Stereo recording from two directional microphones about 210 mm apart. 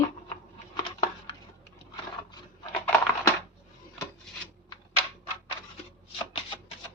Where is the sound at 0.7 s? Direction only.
25° left (ahead or behind).